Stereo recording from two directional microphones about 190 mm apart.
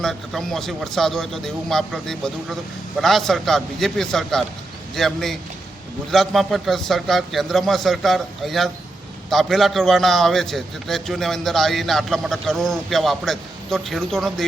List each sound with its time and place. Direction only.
0.0 s a man's voice: centre (ahead or behind)